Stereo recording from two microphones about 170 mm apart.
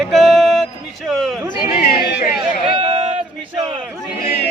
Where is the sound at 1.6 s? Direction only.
60° left (ahead or behind).